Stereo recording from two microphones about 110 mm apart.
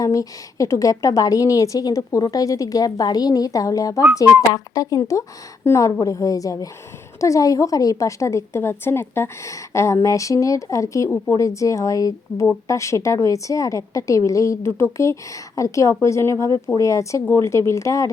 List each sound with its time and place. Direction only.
0.0 s a woman's voice: 30° left (ahead or behind)